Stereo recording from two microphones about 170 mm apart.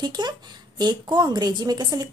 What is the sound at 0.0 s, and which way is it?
A woman's voice, 25° right (ahead or behind).